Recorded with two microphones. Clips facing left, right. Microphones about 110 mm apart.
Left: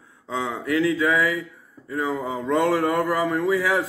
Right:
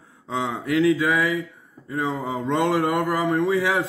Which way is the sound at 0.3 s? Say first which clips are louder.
Right 1 dB; 20° right (ahead or behind).